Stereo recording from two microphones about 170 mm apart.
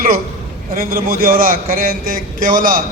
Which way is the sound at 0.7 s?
60° right (ahead or behind).